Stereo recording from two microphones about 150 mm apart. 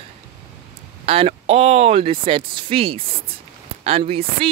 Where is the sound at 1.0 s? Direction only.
40° right (ahead or behind).